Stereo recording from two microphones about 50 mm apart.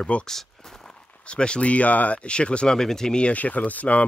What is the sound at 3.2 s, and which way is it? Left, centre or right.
Speech, left.